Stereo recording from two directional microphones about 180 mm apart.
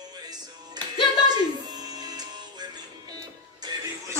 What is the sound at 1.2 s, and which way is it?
Music, 20° right (ahead or behind).